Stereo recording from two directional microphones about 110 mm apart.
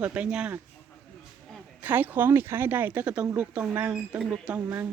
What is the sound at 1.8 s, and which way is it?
Speech, 15° right (ahead or behind).